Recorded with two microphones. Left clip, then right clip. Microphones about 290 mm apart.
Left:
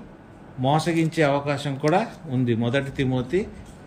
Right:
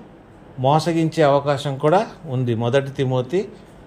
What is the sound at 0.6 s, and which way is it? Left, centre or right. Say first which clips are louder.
Speech: right 4 dB; centre.